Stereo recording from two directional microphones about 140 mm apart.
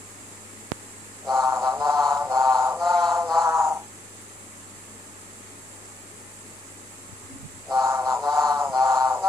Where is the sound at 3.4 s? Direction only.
20° right (ahead or behind).